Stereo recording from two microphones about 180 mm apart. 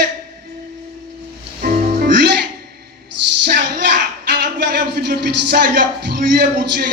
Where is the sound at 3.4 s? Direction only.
70° right (ahead or behind).